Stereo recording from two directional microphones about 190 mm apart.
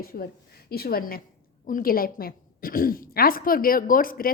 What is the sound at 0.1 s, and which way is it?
Speech, 50° left (ahead or behind).